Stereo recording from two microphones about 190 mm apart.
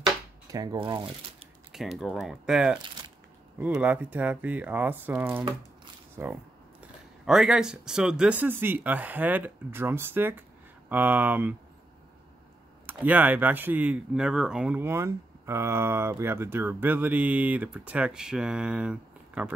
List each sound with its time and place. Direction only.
0.5 s speech: 20° right (ahead or behind)
1.7 s speech: centre (ahead or behind)
12.8 s speech: 10° right (ahead or behind)